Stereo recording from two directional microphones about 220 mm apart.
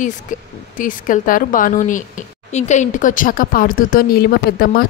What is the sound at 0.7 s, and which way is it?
Speech, 35° left (ahead or behind).